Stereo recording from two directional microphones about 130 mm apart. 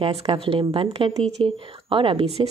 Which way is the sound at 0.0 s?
45° right (ahead or behind).